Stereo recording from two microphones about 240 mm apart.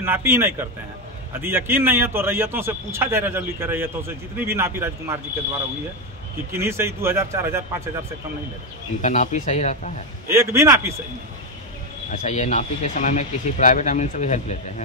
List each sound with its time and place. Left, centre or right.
0.0 s a man's voice: centre
6.5 s a man's voice: centre
9.0 s speech: left
10.2 s a man's voice: centre
12.1 s speech: left